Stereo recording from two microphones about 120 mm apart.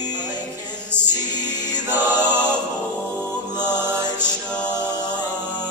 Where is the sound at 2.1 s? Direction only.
35° left (ahead or behind).